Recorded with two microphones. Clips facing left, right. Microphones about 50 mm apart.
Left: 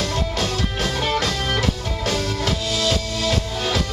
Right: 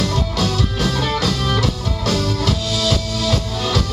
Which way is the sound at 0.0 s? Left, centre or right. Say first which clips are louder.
Right 3 dB; centre.